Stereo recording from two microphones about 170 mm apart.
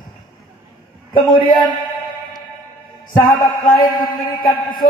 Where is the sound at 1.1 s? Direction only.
25° left (ahead or behind).